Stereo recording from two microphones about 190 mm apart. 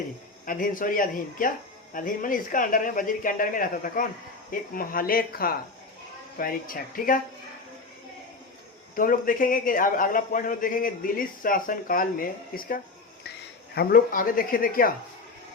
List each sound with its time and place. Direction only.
0.4 s a man's voice: 45° left (ahead or behind)
9.0 s a man's voice: 45° left (ahead or behind)